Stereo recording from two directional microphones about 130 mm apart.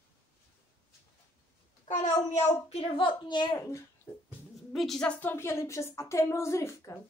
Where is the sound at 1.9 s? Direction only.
65° left (ahead or behind).